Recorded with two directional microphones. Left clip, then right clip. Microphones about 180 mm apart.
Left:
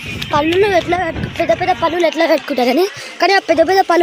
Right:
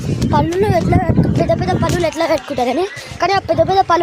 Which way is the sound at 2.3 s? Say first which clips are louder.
Left 2 dB; 35° left (ahead or behind).